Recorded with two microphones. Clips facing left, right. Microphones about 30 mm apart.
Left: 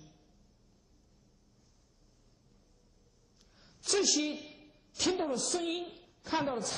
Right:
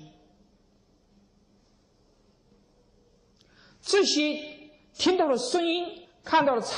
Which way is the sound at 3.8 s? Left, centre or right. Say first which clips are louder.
Right 7 dB; right.